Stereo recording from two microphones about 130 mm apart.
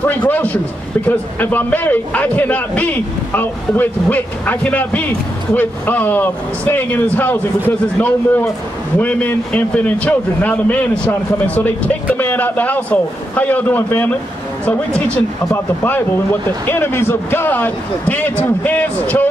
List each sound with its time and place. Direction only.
0.0 s a man's voice: 10° left (ahead or behind)